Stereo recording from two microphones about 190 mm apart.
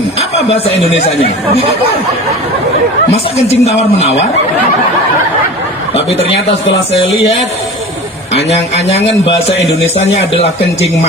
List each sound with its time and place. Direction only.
0.2 s a man's voice: 30° left (ahead or behind)
3.1 s a man's voice: 35° left (ahead or behind)
8.4 s a man's voice: 35° left (ahead or behind)